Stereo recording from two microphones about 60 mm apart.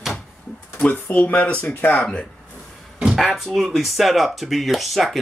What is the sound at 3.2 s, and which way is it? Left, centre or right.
Speech, centre.